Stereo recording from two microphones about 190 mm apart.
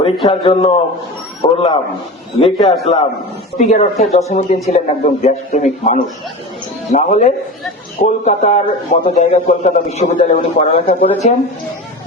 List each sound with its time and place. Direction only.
0.0 s a man's voice: 30° left (ahead or behind)